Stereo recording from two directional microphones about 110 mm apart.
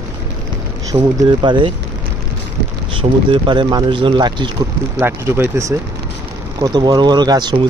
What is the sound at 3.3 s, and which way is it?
Speech, 50° right (ahead or behind).